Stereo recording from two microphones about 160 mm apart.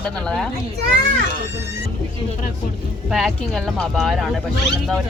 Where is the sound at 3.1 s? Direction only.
Centre (ahead or behind).